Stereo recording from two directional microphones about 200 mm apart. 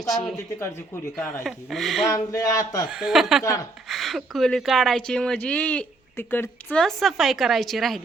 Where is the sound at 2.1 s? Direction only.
15° left (ahead or behind).